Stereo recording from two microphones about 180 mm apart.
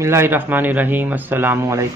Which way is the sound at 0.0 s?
15° right (ahead or behind).